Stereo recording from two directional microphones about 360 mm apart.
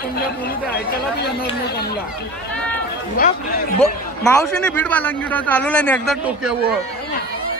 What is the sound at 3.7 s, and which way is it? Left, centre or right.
A man's voice, centre.